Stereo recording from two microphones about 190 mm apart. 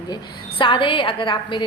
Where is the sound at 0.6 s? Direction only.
25° left (ahead or behind).